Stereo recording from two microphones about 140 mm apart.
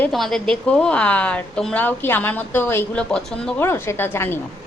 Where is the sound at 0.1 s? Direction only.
Centre (ahead or behind).